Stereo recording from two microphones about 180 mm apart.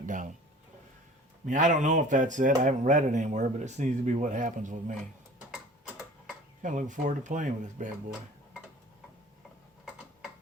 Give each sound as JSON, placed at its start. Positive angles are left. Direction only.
{"t": 0.0, "sound": "a sound", "side_deg": -45}
{"t": 1.5, "sound": "speech", "side_deg": -45}
{"t": 6.6, "sound": "speech", "side_deg": -45}